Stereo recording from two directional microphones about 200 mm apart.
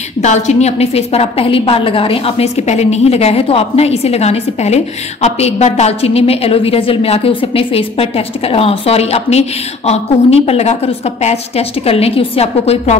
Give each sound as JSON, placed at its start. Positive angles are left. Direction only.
{"t": 0.2, "sound": "a woman's voice", "side_deg": 35}